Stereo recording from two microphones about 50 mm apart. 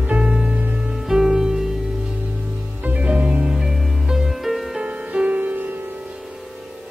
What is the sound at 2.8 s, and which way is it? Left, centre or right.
Music, right.